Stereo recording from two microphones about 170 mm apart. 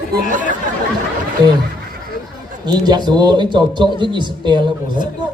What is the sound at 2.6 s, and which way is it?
Speech, 25° right (ahead or behind).